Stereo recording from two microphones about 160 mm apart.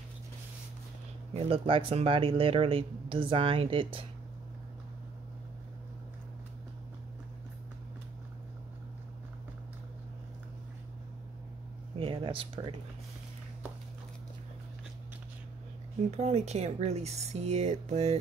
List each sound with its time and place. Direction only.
1.3 s speech: 35° right (ahead or behind)
12.0 s a sound: 35° right (ahead or behind)
16.1 s speech: 40° right (ahead or behind)